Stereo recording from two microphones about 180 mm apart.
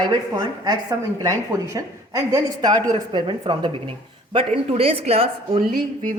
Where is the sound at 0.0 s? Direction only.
20° right (ahead or behind).